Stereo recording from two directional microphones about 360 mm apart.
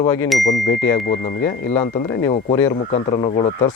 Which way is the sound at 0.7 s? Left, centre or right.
Left.